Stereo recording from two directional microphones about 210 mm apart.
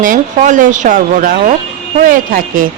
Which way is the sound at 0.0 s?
40° right (ahead or behind).